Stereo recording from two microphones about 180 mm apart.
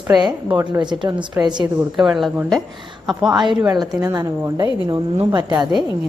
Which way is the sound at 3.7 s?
20° right (ahead or behind).